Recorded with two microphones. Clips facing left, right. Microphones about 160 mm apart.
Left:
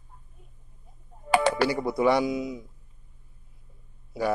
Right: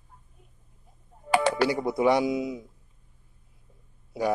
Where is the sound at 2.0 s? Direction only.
20° right (ahead or behind).